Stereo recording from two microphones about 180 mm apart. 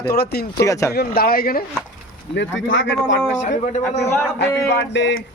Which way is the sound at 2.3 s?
85° left.